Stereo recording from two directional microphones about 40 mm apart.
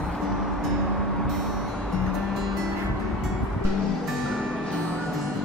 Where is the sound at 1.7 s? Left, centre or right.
Left.